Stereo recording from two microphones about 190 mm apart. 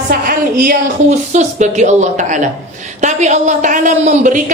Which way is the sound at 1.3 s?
35° right (ahead or behind).